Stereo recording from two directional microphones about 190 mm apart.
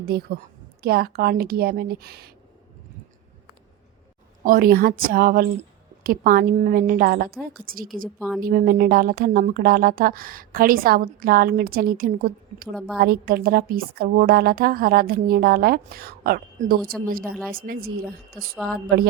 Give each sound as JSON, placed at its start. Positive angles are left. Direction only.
{"t": 0.0, "sound": "speech", "side_deg": -55}
{"t": 4.4, "sound": "speech", "side_deg": -50}